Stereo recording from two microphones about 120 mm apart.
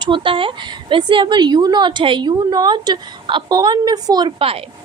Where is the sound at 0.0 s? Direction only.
45° right (ahead or behind).